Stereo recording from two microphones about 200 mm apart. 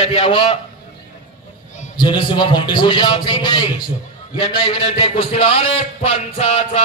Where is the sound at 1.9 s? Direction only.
25° left (ahead or behind).